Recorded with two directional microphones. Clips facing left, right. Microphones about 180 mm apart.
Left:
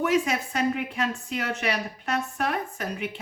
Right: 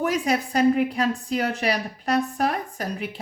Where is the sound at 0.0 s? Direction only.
35° right (ahead or behind).